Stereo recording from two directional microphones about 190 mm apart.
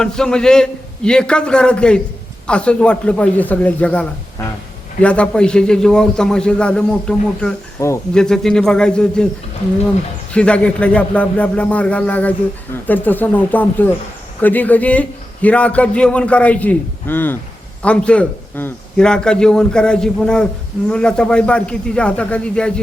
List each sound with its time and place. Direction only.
0.0 s a man's voice: 5° left (ahead or behind)
7.8 s a man's voice: 15° left (ahead or behind)
8.1 s a man's voice: 5° left (ahead or behind)
10.3 s a man's voice: 5° left (ahead or behind)